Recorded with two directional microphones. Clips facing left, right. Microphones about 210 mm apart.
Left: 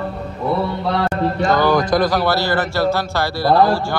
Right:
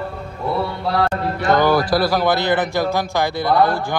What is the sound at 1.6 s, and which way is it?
A man's voice, 10° right (ahead or behind).